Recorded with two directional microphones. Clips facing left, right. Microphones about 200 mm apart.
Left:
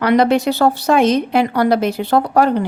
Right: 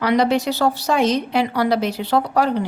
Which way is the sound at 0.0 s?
55° left (ahead or behind).